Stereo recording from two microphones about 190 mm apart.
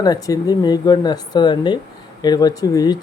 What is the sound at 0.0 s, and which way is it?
Speech, 20° left (ahead or behind).